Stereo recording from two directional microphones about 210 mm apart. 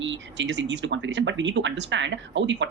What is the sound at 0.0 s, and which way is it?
Speech, 60° right (ahead or behind).